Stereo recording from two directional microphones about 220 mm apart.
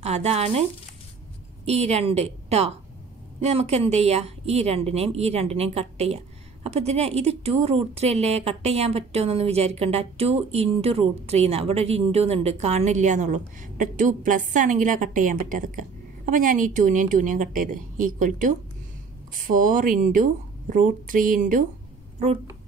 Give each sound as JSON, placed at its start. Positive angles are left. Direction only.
{"t": 0.0, "sound": "speech", "side_deg": -30}
{"t": 1.7, "sound": "a woman's voice", "side_deg": -30}